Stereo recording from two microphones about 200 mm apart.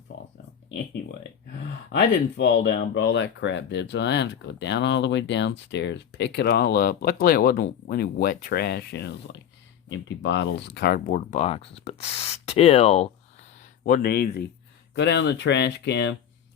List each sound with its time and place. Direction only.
1.9 s speech: 60° left (ahead or behind); by 13.1 s 30° left (ahead or behind)
13.6 s speech: 40° left (ahead or behind); by 16.1 s 60° left (ahead or behind)